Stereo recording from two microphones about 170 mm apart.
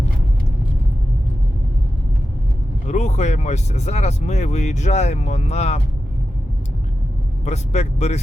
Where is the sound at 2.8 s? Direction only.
45° left (ahead or behind).